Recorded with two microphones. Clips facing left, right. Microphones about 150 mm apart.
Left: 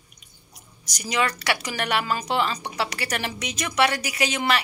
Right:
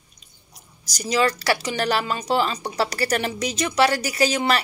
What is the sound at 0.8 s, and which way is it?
Speech, 35° right (ahead or behind).